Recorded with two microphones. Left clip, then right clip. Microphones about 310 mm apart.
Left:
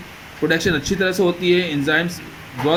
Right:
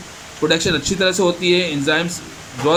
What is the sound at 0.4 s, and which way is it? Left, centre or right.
Speech, right.